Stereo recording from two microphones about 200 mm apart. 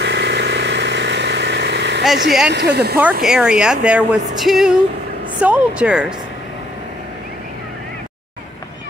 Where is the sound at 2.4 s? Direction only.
55° right (ahead or behind).